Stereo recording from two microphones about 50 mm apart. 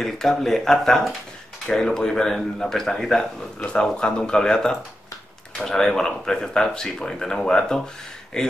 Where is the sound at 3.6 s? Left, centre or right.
Centre.